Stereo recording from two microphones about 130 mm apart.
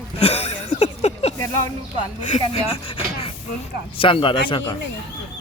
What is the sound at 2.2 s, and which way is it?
Speech, 60° left (ahead or behind).